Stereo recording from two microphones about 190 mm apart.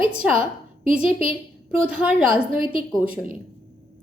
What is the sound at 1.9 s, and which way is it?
Speech, 5° right (ahead or behind).